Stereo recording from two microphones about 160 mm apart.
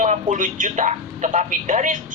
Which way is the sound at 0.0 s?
50° right (ahead or behind).